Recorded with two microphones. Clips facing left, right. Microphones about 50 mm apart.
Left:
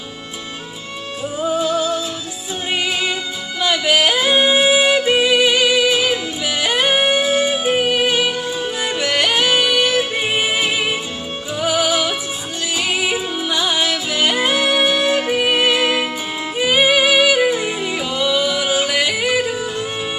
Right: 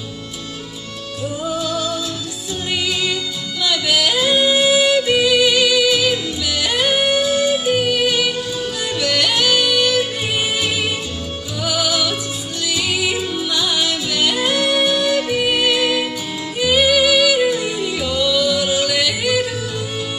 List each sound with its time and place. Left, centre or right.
1.2 s music: left
3.6 s yodeling: left
11.6 s music: left